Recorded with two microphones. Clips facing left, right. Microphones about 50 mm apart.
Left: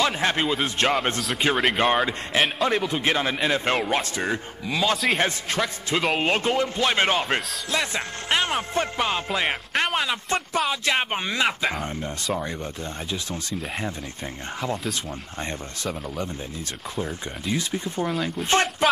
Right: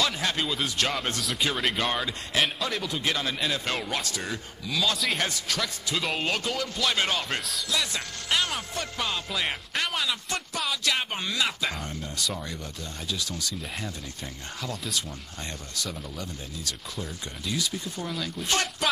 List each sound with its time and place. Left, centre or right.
0.0 s a man's voice: left
4.9 s a man's voice: centre
5.2 s speech: left
14.6 s a man's voice: left